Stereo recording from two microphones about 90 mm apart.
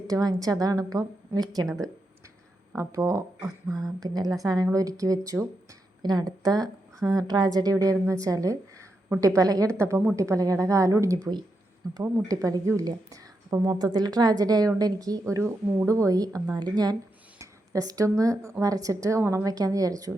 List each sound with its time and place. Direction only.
0.1 s a woman's voice: 45° right (ahead or behind)
1.6 s speech: centre (ahead or behind)
2.7 s speech: 35° right (ahead or behind)
3.7 s speech: centre (ahead or behind)
4.0 s a woman's voice: 45° right (ahead or behind)
15.2 s speech: 30° right (ahead or behind); by 17.0 s 50° right (ahead or behind)
17.3 s speech: 35° right (ahead or behind)
19.2 s a woman's voice: 25° right (ahead or behind)
19.5 s speech: 40° right (ahead or behind)